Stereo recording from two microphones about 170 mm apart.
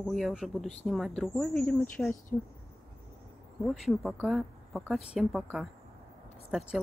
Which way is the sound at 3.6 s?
Centre (ahead or behind).